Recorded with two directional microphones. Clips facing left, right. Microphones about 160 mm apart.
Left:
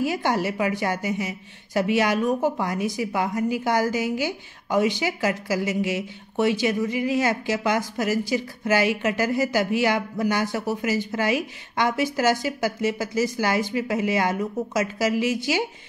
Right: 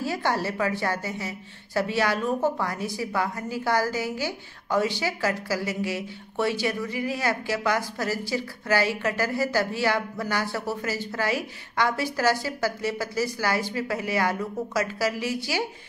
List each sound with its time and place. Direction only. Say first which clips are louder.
0.0 s a woman's voice: left 3 dB; 15° left (ahead or behind)